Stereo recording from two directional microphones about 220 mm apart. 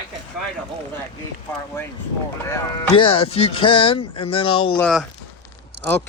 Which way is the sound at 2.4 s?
15° left (ahead or behind).